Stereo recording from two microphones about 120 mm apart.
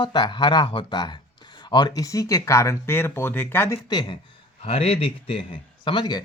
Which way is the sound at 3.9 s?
35° left (ahead or behind).